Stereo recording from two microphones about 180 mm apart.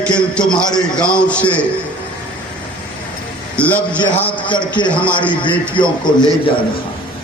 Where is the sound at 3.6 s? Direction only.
5° left (ahead or behind).